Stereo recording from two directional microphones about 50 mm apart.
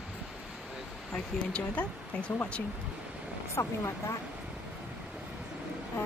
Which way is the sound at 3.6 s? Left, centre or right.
Left.